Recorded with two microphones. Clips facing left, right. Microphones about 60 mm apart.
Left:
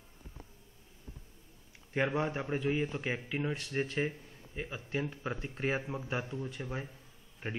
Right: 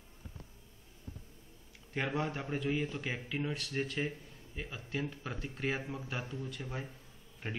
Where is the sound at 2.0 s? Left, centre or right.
Left.